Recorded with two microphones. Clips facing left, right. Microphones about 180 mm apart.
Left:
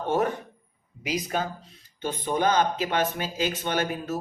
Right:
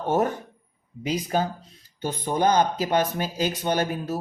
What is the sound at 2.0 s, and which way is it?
Speech, 40° right (ahead or behind).